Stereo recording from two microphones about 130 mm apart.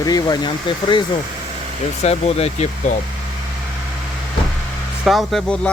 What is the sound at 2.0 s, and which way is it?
Speech, 55° left (ahead or behind).